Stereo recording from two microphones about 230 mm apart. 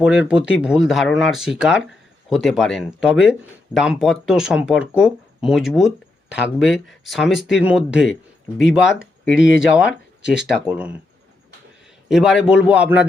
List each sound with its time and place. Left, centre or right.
0.0 s speech: centre
9.3 s speech: left
9.7 s speech: centre
12.0 s speech: centre